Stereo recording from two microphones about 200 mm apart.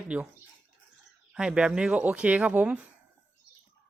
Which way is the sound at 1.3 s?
5° right (ahead or behind).